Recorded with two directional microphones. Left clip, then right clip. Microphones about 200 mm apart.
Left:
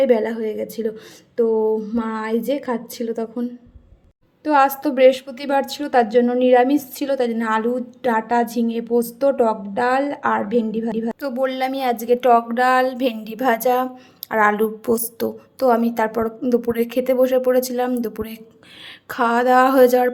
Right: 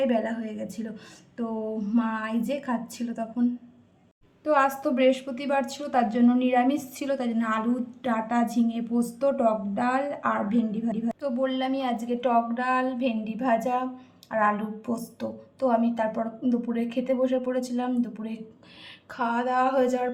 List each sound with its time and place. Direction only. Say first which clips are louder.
0.0 s a woman's voice: left 9 dB; 25° left (ahead or behind)
1.9 s a woman's voice: left 5 dB; 25° left (ahead or behind)
4.4 s a woman's voice: left 6 dB; 25° left (ahead or behind)